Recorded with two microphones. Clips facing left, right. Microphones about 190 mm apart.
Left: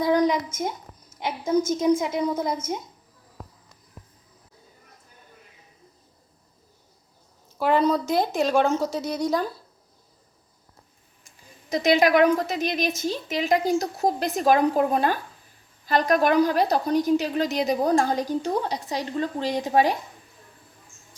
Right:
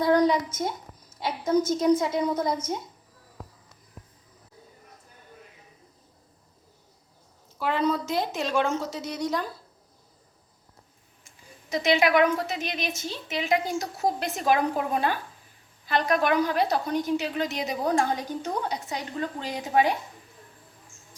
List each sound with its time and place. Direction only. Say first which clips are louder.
0.0 s a sound: even; 10° left (ahead or behind)
1.2 s a woman's voice: left 1 dB; 15° left (ahead or behind)
7.6 s a woman's voice: left 5 dB; 40° left (ahead or behind)
11.7 s a woman's voice: left 3 dB; 40° left (ahead or behind)